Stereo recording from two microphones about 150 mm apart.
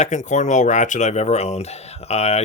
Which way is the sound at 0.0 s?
55° left (ahead or behind).